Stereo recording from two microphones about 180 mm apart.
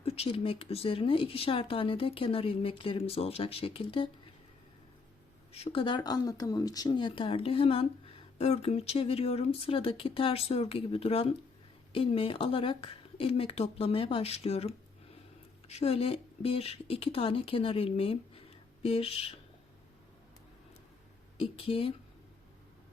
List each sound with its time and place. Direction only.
0.0 s speech: 35° left (ahead or behind)
5.5 s speech: 35° left (ahead or behind)
21.3 s speech: 30° left (ahead or behind)